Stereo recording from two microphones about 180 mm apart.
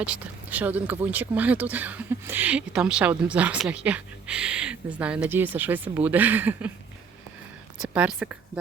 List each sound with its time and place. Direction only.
0.0 s speech: 5° right (ahead or behind)
7.8 s speech: 5° right (ahead or behind)